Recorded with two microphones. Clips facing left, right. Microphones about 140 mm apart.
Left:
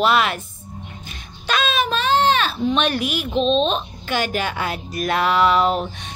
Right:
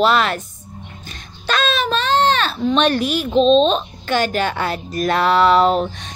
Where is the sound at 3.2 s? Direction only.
35° right (ahead or behind).